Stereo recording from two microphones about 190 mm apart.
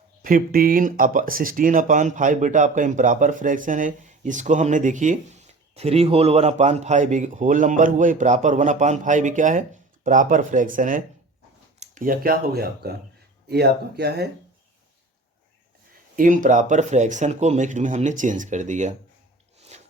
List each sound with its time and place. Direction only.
0.2 s speech: 50° right (ahead or behind)
16.1 s speech: 45° right (ahead or behind)
19.5 s a sound: 35° right (ahead or behind)